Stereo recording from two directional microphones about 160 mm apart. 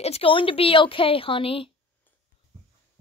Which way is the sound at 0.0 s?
35° left (ahead or behind).